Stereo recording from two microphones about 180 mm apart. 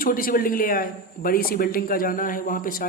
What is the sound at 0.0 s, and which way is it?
A man's voice, 50° left (ahead or behind).